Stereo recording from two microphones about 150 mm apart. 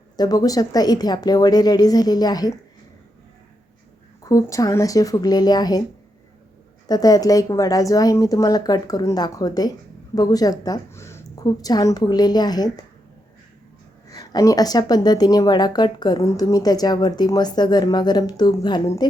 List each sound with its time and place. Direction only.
0.2 s a woman's voice: 25° left (ahead or behind)
4.2 s a woman's voice: 20° left (ahead or behind)
6.8 s a woman's voice: 25° left (ahead or behind)
14.1 s a woman's voice: 25° left (ahead or behind)